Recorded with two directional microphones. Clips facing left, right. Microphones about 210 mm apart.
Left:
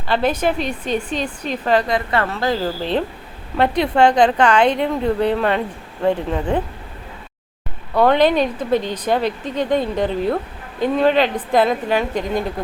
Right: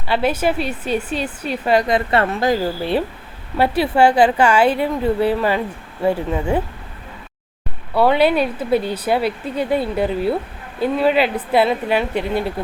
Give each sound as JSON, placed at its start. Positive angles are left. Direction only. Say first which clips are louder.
{"t": 0.1, "sound": "a woman's voice", "louder": "even", "side_deg": -10}
{"t": 1.9, "sound": "a woman's voice", "louder": "right 3 dB", "side_deg": -25}
{"t": 7.9, "sound": "a woman's voice", "louder": "even", "side_deg": -5}